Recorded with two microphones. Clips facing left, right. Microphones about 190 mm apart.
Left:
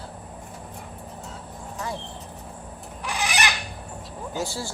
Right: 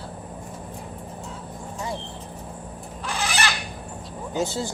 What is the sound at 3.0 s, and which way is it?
Fowl, 15° left (ahead or behind).